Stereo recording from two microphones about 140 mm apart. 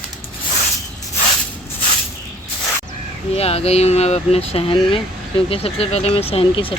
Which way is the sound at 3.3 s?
45° left (ahead or behind).